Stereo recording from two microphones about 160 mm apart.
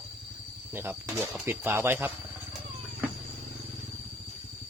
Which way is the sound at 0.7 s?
15° right (ahead or behind).